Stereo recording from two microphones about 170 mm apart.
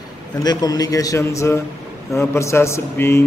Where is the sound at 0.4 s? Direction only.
20° left (ahead or behind).